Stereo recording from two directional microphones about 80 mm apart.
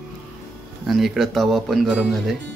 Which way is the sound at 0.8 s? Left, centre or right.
Centre.